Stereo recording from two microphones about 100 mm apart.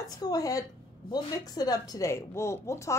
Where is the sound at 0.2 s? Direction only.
40° left (ahead or behind).